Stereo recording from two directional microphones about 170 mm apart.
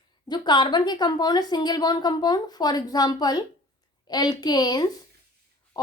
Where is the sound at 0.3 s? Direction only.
25° left (ahead or behind).